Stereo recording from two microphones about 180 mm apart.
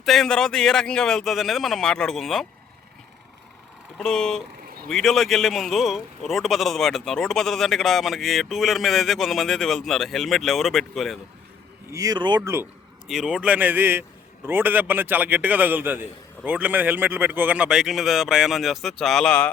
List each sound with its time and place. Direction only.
0.0 s speech: centre (ahead or behind)
3.9 s speech: 5° left (ahead or behind)
11.9 s speech: 20° right (ahead or behind)
12.4 s a man's voice: 15° right (ahead or behind); by 19.5 s 5° left (ahead or behind)